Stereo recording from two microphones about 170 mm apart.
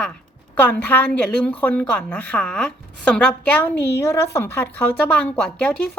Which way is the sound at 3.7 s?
80° left.